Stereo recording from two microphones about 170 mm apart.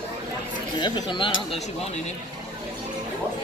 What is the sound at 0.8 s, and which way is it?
Speech, 25° left (ahead or behind).